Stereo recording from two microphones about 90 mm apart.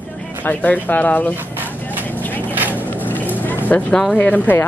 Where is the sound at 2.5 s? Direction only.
20° right (ahead or behind).